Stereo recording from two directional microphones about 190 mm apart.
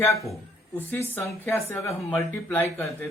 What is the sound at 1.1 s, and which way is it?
Speech, 10° left (ahead or behind).